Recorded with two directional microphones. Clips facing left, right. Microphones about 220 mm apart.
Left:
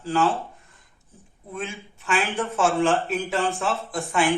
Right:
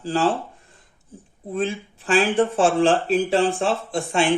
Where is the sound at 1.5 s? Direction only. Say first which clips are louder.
Right 8 dB; 35° right (ahead or behind).